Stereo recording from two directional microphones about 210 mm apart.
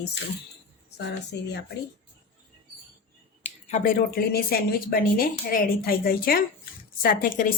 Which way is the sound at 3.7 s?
45° left (ahead or behind).